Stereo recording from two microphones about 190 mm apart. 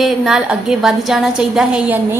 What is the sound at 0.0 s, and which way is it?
A woman's voice, centre (ahead or behind).